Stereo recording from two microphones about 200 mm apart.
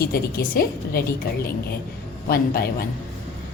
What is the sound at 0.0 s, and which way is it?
A woman's voice, 50° left (ahead or behind).